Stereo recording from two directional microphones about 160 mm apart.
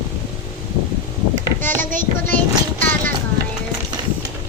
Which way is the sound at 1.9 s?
55° right (ahead or behind).